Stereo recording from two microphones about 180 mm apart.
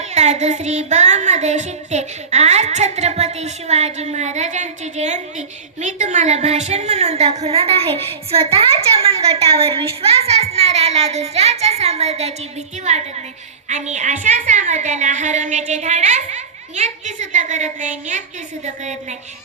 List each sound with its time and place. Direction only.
0.1 s a woman's voice: 40° right (ahead or behind)
13.7 s a woman's voice: 40° right (ahead or behind)